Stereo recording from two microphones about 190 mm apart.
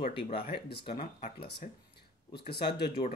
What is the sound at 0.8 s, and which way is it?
Speech, 30° left (ahead or behind).